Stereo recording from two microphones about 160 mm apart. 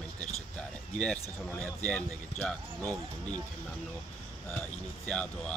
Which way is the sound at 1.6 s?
10° left (ahead or behind).